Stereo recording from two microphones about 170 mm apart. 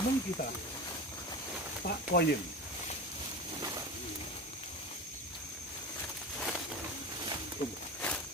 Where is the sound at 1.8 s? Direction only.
65° left (ahead or behind).